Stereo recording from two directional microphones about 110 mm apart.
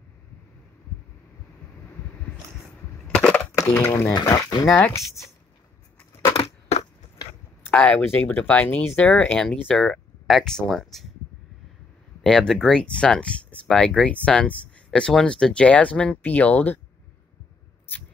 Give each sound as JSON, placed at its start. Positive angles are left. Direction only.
{"t": 3.1, "sound": "crushing", "side_deg": 5}
{"t": 3.5, "sound": "speech", "side_deg": 25}
{"t": 6.3, "sound": "crushing", "side_deg": 60}
{"t": 7.6, "sound": "speech", "side_deg": 10}
{"t": 12.2, "sound": "speech", "side_deg": 5}